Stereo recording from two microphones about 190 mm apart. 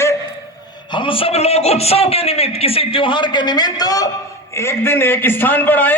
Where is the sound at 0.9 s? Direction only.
25° left (ahead or behind).